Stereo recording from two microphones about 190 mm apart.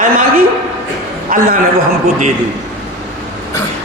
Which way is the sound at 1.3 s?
45° right (ahead or behind).